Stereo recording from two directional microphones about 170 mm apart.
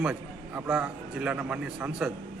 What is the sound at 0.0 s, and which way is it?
A man's voice, 5° right (ahead or behind).